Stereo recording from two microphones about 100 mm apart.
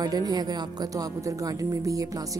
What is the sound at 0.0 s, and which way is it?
A woman's voice, 40° right (ahead or behind).